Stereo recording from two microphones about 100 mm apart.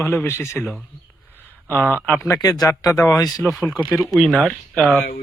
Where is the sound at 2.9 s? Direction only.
5° left (ahead or behind).